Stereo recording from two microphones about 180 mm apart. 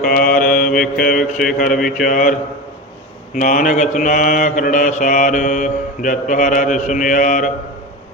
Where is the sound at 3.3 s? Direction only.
45° left (ahead or behind).